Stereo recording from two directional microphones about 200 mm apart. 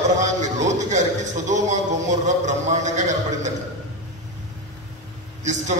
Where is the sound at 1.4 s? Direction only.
35° right (ahead or behind).